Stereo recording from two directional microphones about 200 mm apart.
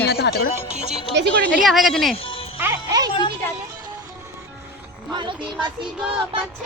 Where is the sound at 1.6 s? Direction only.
Centre (ahead or behind).